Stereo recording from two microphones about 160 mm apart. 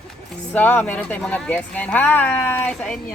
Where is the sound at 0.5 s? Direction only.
10° left (ahead or behind).